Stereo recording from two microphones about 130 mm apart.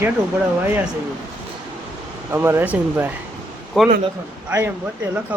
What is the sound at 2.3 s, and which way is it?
Speech, 20° right (ahead or behind).